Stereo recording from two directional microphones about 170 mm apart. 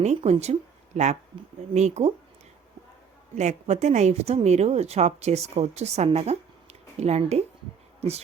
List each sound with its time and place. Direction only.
0.0 s a woman's voice: 40° right (ahead or behind)
3.3 s a woman's voice: 40° right (ahead or behind)